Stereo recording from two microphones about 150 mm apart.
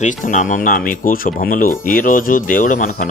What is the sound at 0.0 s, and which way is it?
Speech, 60° left (ahead or behind).